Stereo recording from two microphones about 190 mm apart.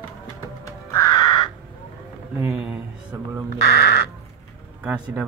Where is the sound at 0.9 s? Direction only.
20° left (ahead or behind).